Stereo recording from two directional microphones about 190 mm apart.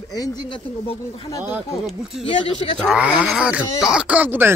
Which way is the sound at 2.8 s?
Centre (ahead or behind).